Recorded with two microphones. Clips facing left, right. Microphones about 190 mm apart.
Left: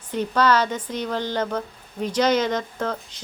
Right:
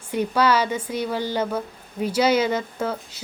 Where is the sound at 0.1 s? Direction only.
10° right (ahead or behind).